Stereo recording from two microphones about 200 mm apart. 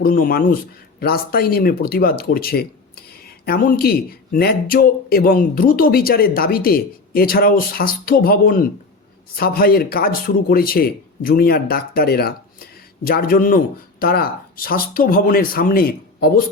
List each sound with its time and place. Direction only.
0.0 s speech: 45° left (ahead or behind)